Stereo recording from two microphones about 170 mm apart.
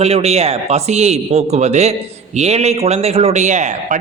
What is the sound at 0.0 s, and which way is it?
A man's voice, 40° right (ahead or behind).